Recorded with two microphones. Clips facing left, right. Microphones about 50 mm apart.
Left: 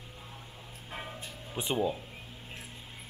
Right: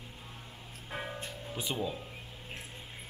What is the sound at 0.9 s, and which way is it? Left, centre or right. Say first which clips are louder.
Music: right 2 dB; centre.